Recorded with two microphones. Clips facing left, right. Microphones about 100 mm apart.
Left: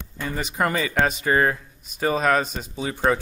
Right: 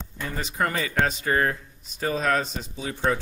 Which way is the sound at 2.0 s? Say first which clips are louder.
Left 4 dB; 80° left.